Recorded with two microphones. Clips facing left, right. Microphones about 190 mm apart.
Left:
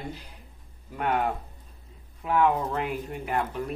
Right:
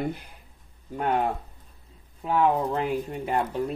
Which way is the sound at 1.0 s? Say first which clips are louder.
Right 1 dB; 35° right (ahead or behind).